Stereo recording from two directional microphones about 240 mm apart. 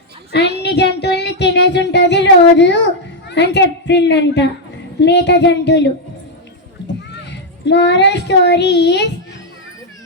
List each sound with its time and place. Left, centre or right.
0.3 s speech: left
0.6 s child singing: left
4.9 s speech: left
7.1 s speech: left